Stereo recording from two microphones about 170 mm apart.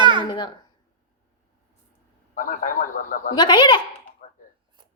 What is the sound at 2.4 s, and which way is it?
Speech, 55° left (ahead or behind).